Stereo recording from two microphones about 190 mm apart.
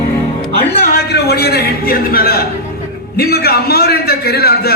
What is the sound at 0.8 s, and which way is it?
A man's voice, 55° left (ahead or behind).